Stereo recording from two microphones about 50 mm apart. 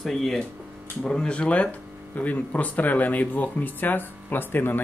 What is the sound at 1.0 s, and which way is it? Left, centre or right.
Speech, centre.